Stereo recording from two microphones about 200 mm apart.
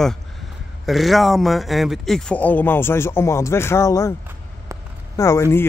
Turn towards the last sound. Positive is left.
turn(degrees=15)  # may be behind; listen again after turning